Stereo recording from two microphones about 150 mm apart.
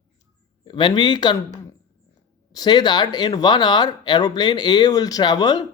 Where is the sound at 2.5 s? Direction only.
25° left (ahead or behind).